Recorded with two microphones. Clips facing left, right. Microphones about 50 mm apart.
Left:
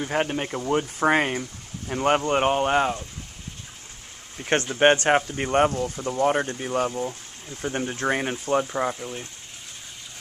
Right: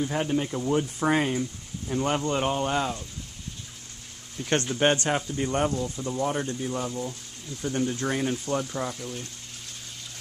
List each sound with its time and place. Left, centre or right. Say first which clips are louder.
0.0 s speech: left 1 dB; left
4.4 s speech: left 4 dB; left